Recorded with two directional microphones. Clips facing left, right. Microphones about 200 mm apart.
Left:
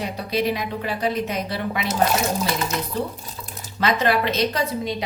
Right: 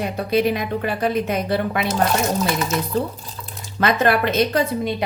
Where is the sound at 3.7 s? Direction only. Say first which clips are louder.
Right 3 dB; 55° right (ahead or behind).